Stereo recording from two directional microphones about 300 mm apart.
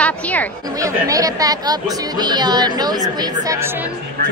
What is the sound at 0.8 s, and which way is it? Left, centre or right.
Speech, centre.